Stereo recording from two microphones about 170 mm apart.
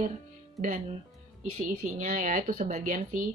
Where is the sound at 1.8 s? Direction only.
50° right (ahead or behind).